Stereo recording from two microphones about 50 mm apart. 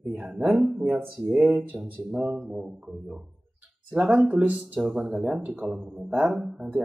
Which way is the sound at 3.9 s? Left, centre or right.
Centre.